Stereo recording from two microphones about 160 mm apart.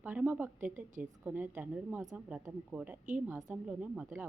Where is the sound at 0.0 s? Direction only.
10° right (ahead or behind).